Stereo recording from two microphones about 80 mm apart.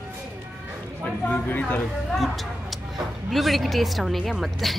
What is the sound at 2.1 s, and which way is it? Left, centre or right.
Speech, centre.